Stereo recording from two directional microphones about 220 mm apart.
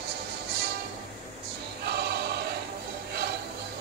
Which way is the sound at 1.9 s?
50° right (ahead or behind).